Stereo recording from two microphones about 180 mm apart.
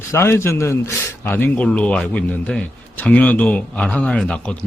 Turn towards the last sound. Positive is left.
turn(degrees=5)  # may be behind; listen again after turning